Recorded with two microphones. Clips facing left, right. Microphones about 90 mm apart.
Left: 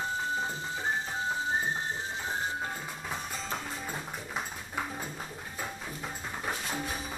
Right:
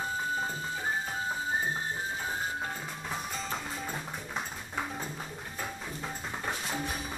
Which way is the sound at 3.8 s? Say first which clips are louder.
Even; 5° left (ahead or behind).